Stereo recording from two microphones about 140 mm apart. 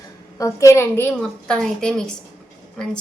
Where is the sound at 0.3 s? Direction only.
20° left (ahead or behind).